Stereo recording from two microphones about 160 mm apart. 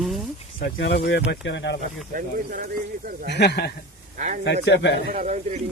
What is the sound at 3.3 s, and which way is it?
Speech, 90° left.